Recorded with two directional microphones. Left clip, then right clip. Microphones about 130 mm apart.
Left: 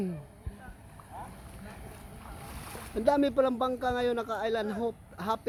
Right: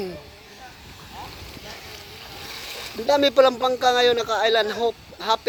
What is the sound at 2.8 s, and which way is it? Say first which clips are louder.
Speech: right 6 dB; centre (ahead or behind).